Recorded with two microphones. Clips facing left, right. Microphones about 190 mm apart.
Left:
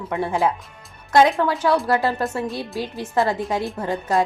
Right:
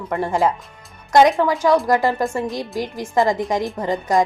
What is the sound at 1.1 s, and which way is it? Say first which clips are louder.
A woman's voice: right 2 dB; 15° right (ahead or behind).